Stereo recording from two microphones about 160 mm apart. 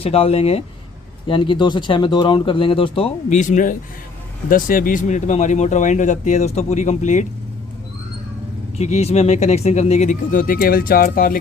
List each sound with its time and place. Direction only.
0.0 s speech: 40° left (ahead or behind)
8.8 s speech: 45° left (ahead or behind); by 11.3 s 60° left (ahead or behind)